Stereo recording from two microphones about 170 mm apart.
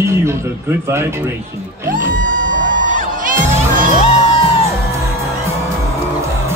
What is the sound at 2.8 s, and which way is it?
Crowd, 50° right (ahead or behind).